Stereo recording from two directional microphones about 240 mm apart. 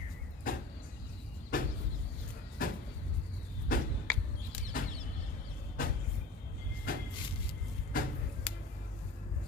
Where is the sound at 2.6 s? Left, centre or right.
Left.